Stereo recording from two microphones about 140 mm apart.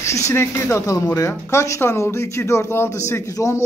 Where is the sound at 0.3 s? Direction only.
20° left (ahead or behind).